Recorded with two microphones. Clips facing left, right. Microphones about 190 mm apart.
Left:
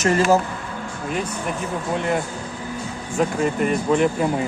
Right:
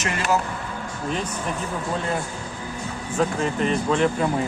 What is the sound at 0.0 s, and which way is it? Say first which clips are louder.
Speech: left 7 dB; 40° left (ahead or behind).